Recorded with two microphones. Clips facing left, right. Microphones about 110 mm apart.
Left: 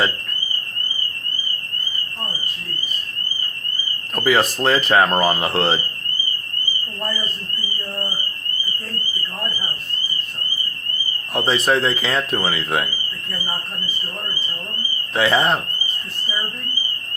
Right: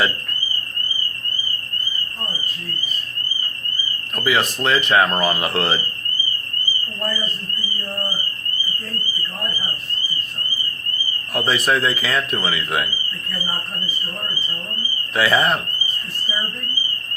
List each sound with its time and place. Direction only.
4.1 s speech: 40° left (ahead or behind)
11.3 s speech: 30° left (ahead or behind)
15.1 s speech: 25° left (ahead or behind)